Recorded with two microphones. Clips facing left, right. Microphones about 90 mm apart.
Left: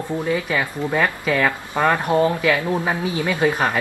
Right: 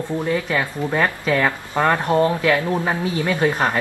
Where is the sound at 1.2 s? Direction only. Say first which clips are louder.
Right 1 dB; 10° right (ahead or behind).